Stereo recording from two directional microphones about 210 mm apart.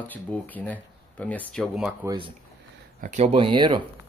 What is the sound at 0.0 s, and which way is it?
Speech, 10° left (ahead or behind).